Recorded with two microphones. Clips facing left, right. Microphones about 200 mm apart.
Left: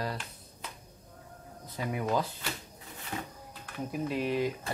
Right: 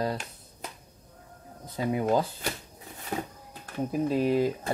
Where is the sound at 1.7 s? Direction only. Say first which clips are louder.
Right 6 dB; 25° right (ahead or behind).